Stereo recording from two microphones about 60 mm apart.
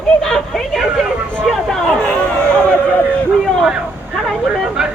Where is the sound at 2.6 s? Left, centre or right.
Left.